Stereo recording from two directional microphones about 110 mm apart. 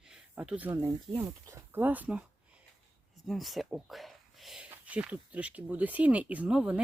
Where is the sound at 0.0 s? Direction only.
5° right (ahead or behind).